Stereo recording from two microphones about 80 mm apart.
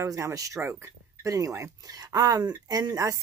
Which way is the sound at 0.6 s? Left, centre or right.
Right.